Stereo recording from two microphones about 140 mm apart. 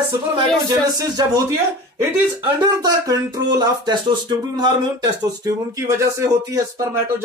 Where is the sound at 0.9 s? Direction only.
30° right (ahead or behind).